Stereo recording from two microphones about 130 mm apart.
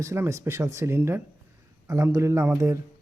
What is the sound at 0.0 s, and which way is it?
Speech, 20° right (ahead or behind).